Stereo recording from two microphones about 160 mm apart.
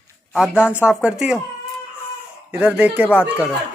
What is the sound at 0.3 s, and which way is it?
A man's voice, 5° right (ahead or behind).